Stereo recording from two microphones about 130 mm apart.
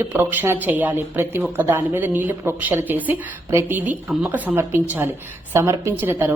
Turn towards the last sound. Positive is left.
turn(degrees=-15)  # may be behind; listen again after turning